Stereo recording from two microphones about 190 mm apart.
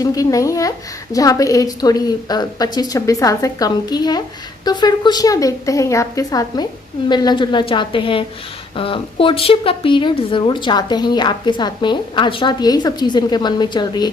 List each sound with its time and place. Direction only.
0.0 s a woman's voice: 20° left (ahead or behind)